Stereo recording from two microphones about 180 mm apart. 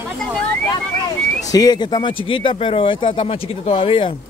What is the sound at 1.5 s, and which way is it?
Speech, 20° left (ahead or behind).